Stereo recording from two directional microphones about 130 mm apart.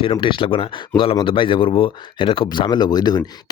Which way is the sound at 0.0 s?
40° left (ahead or behind).